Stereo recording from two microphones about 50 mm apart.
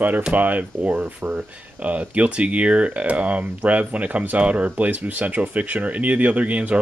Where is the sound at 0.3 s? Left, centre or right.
Right.